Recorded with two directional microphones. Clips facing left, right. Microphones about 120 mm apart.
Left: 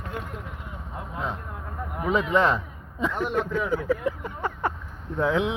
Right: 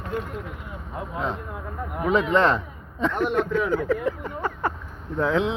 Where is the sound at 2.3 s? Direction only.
10° left (ahead or behind).